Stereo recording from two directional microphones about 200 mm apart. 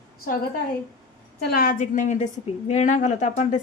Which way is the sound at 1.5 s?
45° left (ahead or behind).